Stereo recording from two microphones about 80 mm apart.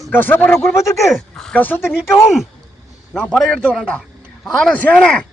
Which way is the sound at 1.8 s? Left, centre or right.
Centre.